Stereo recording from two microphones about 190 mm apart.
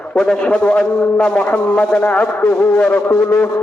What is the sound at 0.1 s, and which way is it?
A man's voice, 5° left (ahead or behind).